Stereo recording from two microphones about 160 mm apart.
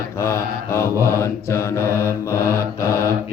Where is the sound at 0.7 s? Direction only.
15° left (ahead or behind).